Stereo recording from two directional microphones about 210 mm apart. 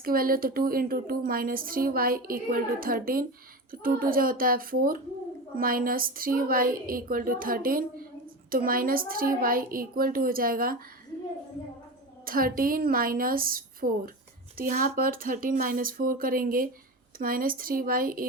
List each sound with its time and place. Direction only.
0.0 s speech: 45° right (ahead or behind)
12.2 s speech: 45° right (ahead or behind)